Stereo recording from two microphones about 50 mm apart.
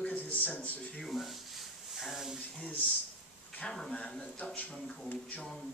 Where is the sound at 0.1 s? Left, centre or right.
Left.